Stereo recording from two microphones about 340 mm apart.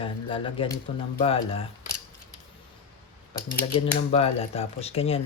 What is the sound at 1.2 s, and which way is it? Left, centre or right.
Speech, centre.